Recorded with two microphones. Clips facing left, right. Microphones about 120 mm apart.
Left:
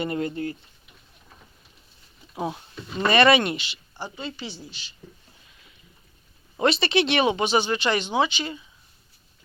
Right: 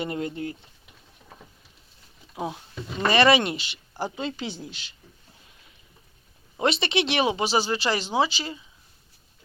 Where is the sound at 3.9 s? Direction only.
90° right.